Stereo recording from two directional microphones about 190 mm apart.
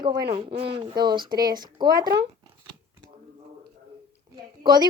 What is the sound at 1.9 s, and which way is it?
Speech, 55° right (ahead or behind).